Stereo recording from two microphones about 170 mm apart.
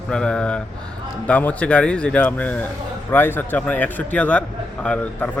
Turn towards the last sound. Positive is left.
turn(degrees=5)  # may be behind; listen again after turning